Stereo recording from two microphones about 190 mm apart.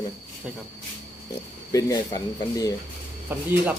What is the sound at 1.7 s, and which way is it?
Speech, 20° left (ahead or behind).